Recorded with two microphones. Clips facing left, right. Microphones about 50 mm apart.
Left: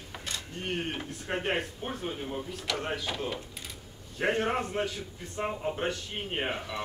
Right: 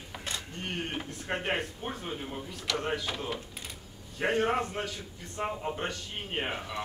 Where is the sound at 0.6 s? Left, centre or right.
Centre.